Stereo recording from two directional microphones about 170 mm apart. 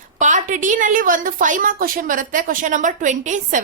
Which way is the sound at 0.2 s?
45° right (ahead or behind).